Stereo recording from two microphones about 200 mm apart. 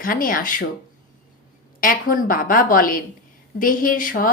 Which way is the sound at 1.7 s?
45° left (ahead or behind).